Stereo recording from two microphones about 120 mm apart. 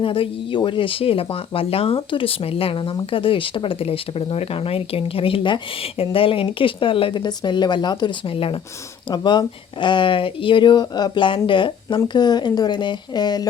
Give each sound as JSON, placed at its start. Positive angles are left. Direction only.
{"t": 0.0, "sound": "speech", "side_deg": 45}